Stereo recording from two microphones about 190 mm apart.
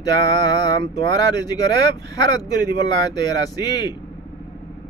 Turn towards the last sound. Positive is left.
turn(degrees=20)  # may be behind; listen again after turning